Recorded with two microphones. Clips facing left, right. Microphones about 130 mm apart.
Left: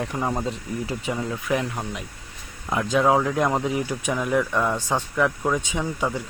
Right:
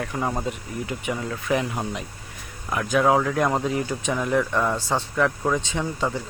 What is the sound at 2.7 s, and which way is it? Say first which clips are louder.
Speech: even; 25° left (ahead or behind).